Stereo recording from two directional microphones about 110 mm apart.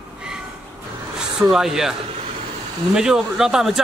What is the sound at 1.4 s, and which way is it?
Speech, 5° right (ahead or behind).